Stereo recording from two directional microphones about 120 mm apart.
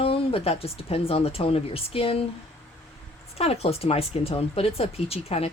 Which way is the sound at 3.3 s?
60° left (ahead or behind).